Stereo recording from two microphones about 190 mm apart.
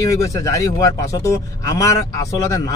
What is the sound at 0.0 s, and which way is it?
Speech, 15° left (ahead or behind).